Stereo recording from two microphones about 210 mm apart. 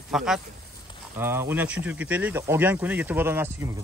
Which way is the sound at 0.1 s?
Centre (ahead or behind).